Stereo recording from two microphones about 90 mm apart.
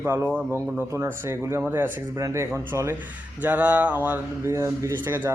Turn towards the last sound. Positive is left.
turn(degrees=-25)  # may be behind; listen again after turning